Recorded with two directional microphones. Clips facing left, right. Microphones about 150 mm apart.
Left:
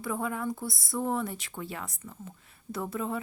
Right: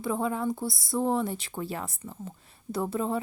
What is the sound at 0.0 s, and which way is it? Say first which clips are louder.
Speech: right 4 dB; 25° right (ahead or behind).